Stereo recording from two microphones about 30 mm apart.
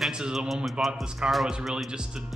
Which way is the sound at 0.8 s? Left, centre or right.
Right.